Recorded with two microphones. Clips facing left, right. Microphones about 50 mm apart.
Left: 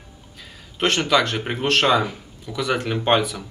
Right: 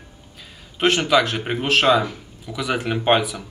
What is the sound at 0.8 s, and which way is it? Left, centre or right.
A man's voice, centre.